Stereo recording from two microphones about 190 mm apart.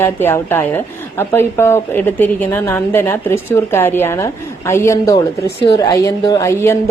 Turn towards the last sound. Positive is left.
turn(degrees=15)  # may be behind; listen again after turning